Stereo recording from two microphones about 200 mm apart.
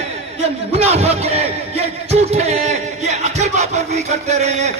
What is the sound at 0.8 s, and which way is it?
Music, 30° right (ahead or behind).